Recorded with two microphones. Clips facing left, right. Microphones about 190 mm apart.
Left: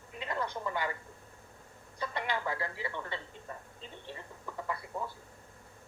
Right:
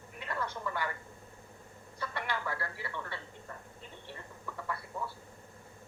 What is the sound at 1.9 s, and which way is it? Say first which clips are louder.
Speech: left 2 dB; 20° left (ahead or behind).